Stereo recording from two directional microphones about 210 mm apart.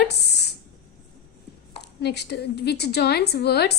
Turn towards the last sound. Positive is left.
turn(degrees=50)  # may be behind; listen again after turning